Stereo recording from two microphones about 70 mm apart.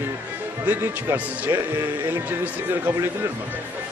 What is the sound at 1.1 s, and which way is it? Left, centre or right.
Speech, right.